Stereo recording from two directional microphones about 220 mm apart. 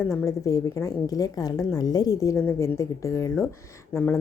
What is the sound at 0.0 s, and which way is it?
Speech, 10° left (ahead or behind).